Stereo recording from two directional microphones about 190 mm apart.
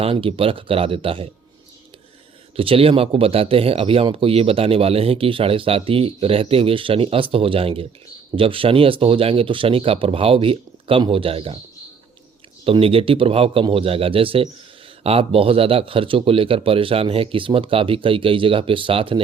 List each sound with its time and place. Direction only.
0.0 s speech: 30° right (ahead or behind)
2.6 s speech: 30° right (ahead or behind)
12.6 s speech: 30° right (ahead or behind)